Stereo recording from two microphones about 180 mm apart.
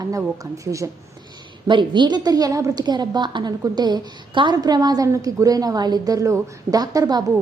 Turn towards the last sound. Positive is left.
turn(degrees=-20)  # may be behind; listen again after turning